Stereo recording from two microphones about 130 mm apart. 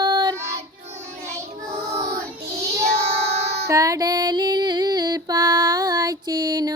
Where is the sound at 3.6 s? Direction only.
25° right (ahead or behind).